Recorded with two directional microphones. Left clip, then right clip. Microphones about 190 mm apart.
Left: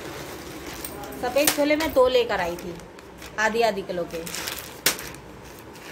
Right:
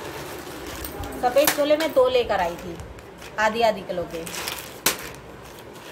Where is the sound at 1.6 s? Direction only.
35° left (ahead or behind).